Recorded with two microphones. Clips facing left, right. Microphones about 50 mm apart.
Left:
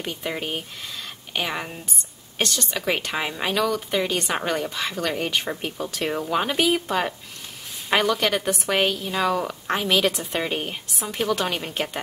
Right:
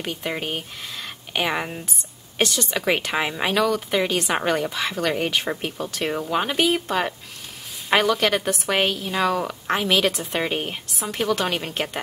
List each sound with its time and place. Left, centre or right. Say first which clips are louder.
0.0 s a woman's voice: right 1 dB; centre